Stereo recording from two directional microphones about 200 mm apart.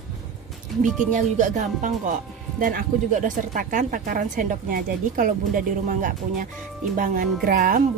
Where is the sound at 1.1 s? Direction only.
40° right (ahead or behind).